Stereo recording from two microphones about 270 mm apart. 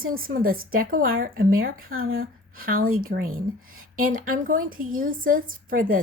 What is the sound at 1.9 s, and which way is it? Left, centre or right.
Speech, right.